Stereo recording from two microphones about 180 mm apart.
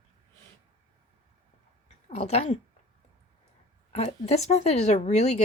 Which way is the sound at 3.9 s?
35° left (ahead or behind).